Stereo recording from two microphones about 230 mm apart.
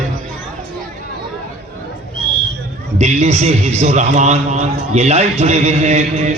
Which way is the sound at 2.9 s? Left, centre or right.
Right.